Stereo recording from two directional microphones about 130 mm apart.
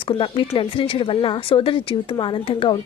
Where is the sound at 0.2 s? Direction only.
40° left (ahead or behind).